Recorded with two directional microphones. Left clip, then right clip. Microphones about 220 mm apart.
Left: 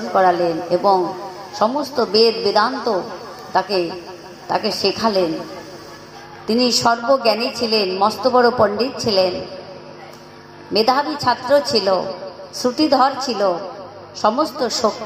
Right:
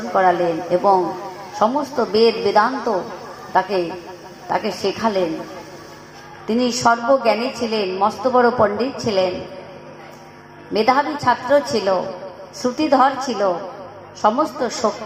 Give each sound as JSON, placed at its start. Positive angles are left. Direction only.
{"t": 0.0, "sound": "a woman's voice", "side_deg": 25}
{"t": 6.5, "sound": "a woman's voice", "side_deg": 30}
{"t": 10.8, "sound": "a woman's voice", "side_deg": 30}